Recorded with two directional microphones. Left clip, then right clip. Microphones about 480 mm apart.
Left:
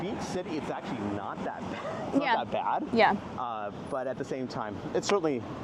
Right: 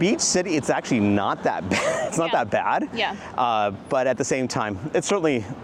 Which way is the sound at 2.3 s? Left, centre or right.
Right.